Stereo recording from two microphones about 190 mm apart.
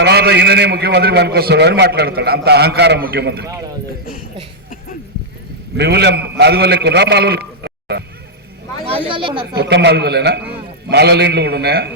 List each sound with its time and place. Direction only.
0.0 s a man's voice: 60° right (ahead or behind)
3.4 s a man's voice: 20° right (ahead or behind)
5.7 s a man's voice: 60° right (ahead or behind)
9.0 s a man's voice: 25° right (ahead or behind)
9.6 s a man's voice: 65° right (ahead or behind)